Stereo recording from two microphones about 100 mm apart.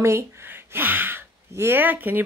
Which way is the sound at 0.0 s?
25° right (ahead or behind).